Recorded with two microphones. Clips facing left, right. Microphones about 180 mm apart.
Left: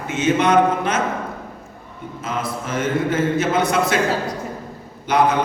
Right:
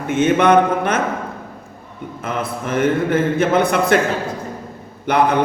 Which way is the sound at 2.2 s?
60° right (ahead or behind).